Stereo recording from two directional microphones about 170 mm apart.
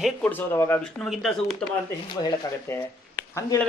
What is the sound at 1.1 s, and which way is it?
Speech, centre (ahead or behind).